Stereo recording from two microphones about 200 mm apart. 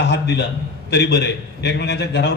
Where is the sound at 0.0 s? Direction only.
55° left (ahead or behind).